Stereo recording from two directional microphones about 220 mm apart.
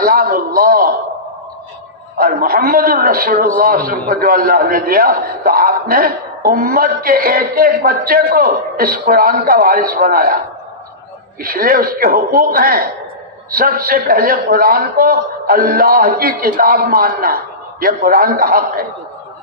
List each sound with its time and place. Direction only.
0.0 s a man's voice: 40° right (ahead or behind)
2.1 s a man's voice: 40° right (ahead or behind)
11.4 s a man's voice: 40° right (ahead or behind)